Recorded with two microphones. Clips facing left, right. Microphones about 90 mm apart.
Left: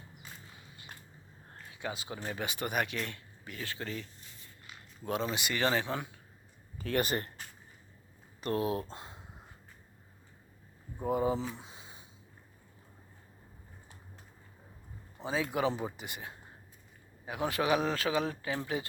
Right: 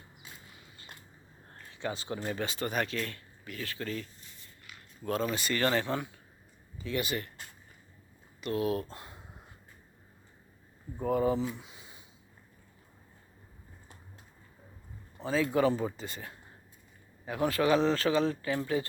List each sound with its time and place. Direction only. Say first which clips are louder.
1.5 s speech: right 3 dB; 10° left (ahead or behind)
2.4 s speech: left 1 dB; 15° left (ahead or behind)
5.0 s speech: right 2 dB; 20° left (ahead or behind)
6.7 s speech: left 2 dB; 50° left (ahead or behind)
8.4 s speech: even; 40° left (ahead or behind)
8.6 s speech: right 2 dB; 25° left (ahead or behind)
11.0 s speech: right 2 dB; 20° left (ahead or behind)
11.3 s a sound: right 4 dB; 30° left (ahead or behind)
15.2 s speech: right 4 dB; 15° left (ahead or behind)